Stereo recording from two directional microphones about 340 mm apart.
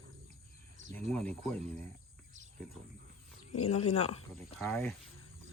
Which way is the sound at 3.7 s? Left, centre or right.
Centre.